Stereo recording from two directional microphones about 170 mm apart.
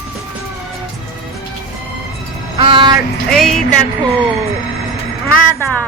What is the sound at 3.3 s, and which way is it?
Music, 5° left (ahead or behind).